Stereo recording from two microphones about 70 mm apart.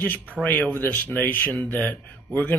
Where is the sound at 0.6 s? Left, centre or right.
Left.